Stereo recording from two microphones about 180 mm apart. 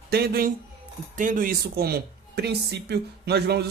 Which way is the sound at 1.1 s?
45° right (ahead or behind).